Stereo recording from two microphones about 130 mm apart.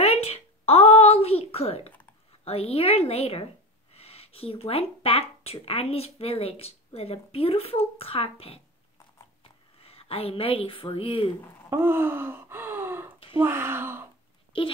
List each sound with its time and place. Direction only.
0.0 s a sound: 50° left (ahead or behind)
2.4 s a woman's voice: 50° left (ahead or behind)
11.7 s speech: 15° right (ahead or behind)